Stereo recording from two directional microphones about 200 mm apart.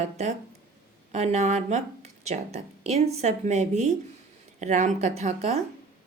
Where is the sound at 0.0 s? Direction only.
35° right (ahead or behind).